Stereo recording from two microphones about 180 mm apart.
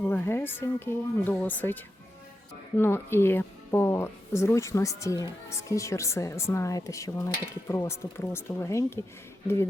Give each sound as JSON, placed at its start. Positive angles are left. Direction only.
{"t": 0.0, "sound": "speech", "side_deg": 10}